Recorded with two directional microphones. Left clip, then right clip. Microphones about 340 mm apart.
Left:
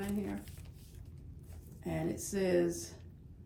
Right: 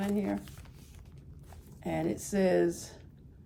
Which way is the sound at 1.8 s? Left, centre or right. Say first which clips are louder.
Right 5 dB; right.